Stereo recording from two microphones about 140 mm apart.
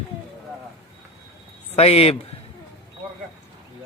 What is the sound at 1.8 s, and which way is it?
Speech, 45° left (ahead or behind).